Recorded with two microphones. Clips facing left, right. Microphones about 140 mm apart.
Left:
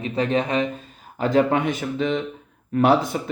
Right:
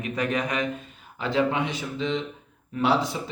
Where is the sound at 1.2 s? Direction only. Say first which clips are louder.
Left 5 dB; 45° left (ahead or behind).